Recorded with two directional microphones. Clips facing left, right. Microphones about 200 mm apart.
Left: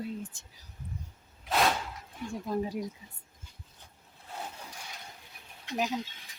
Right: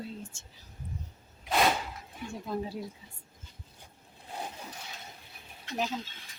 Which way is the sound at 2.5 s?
15° left (ahead or behind).